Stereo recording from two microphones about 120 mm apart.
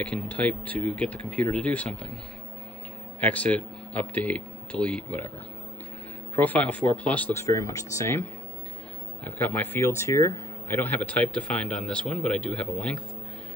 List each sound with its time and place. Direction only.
0.0 s speech: 10° left (ahead or behind)
3.2 s speech: 15° left (ahead or behind)
6.3 s speech: 15° left (ahead or behind)
7.4 s speech: 25° left (ahead or behind); by 13.0 s 10° left (ahead or behind)